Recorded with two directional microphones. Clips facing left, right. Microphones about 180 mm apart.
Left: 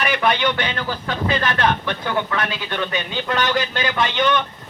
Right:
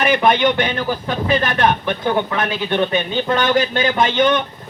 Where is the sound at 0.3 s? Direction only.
20° right (ahead or behind).